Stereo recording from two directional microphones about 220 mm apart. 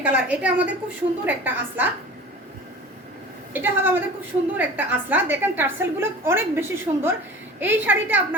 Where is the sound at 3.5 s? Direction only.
10° right (ahead or behind).